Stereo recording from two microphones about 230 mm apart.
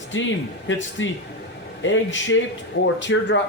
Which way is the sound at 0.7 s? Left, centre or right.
Left.